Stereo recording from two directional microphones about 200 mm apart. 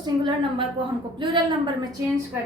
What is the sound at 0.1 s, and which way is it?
A woman's voice, 20° right (ahead or behind).